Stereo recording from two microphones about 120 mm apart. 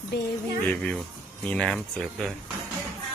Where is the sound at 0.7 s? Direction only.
10° left (ahead or behind).